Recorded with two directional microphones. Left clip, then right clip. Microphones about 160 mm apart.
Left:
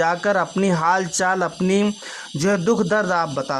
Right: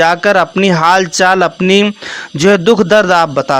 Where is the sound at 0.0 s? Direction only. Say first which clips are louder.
Right 10 dB; 20° right (ahead or behind).